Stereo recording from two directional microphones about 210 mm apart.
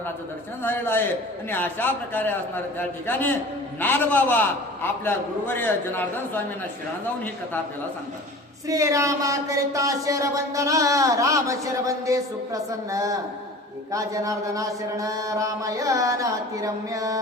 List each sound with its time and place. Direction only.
0.6 s a man's voice: 10° left (ahead or behind)
8.6 s speech: 15° right (ahead or behind)